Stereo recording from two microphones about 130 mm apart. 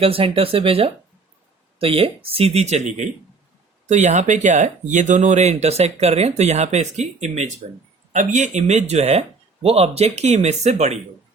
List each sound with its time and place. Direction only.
0.0 s speech: 45° right (ahead or behind)